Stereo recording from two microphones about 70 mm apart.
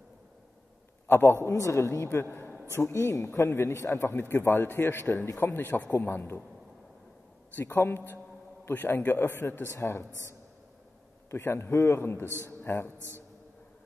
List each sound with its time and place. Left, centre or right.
1.0 s a man's voice: left
7.5 s a man's voice: left
11.2 s a man's voice: left